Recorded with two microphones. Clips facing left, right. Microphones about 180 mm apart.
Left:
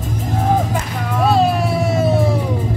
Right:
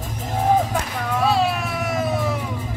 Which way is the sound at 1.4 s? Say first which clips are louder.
Left 6 dB; 35° left (ahead or behind).